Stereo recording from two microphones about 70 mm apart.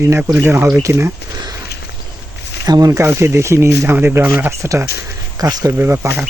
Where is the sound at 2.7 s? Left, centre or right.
Right.